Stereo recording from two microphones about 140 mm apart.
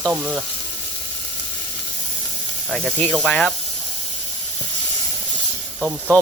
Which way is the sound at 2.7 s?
5° left (ahead or behind).